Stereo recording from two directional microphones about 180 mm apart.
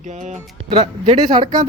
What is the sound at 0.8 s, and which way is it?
Speech, 25° right (ahead or behind).